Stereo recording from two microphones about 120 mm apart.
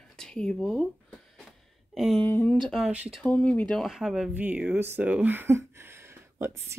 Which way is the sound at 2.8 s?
5° right (ahead or behind).